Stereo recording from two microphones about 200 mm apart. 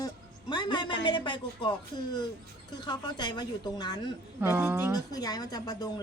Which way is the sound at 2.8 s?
20° left (ahead or behind).